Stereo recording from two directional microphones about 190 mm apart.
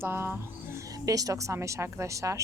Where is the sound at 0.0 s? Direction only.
10° right (ahead or behind).